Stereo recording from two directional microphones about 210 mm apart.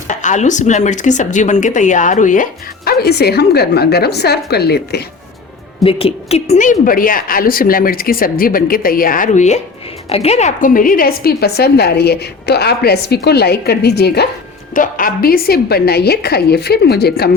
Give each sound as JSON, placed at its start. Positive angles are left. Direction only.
{"t": 0.1, "sound": "a woman's voice", "side_deg": 35}
{"t": 5.8, "sound": "a woman's voice", "side_deg": 25}
{"t": 14.7, "sound": "a woman's voice", "side_deg": 40}